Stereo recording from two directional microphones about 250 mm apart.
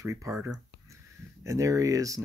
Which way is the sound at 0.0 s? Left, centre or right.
Centre.